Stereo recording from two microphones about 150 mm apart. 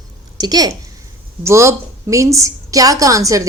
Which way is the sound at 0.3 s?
25° right (ahead or behind).